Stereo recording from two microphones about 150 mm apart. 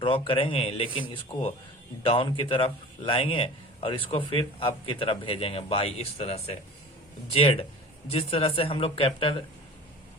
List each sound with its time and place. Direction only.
0.0 s a man's voice: 35° left (ahead or behind)
2.0 s a man's voice: 35° left (ahead or behind)